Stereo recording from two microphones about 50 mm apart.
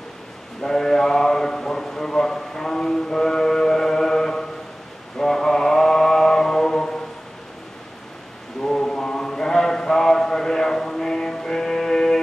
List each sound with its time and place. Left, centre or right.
0.6 s a sound: centre
5.1 s mantra: centre
8.6 s mantra: centre